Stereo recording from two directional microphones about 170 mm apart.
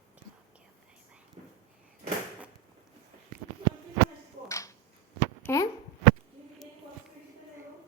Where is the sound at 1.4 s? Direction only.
35° right (ahead or behind).